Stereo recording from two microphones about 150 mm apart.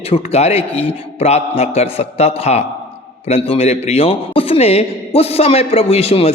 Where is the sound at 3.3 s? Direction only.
40° left (ahead or behind).